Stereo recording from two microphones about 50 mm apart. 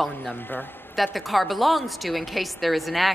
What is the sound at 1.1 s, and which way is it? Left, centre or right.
A woman's voice, centre.